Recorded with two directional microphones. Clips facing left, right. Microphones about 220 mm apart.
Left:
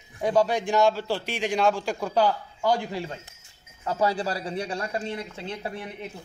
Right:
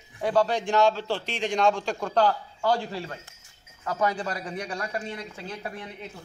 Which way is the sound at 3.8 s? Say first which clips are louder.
Left 2 dB; 30° left (ahead or behind).